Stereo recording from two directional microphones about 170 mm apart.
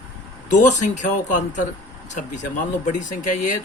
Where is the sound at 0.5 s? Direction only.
45° left (ahead or behind).